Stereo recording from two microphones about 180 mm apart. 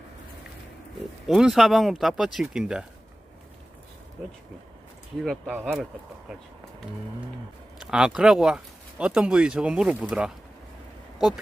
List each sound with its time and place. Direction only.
1.3 s speech: centre (ahead or behind)
5.1 s speech: centre (ahead or behind)
7.9 s speech: 5° right (ahead or behind)